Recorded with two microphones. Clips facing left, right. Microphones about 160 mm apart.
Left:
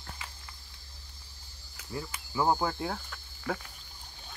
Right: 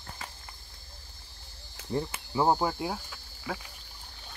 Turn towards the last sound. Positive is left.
turn(degrees=-5)  # may be behind; listen again after turning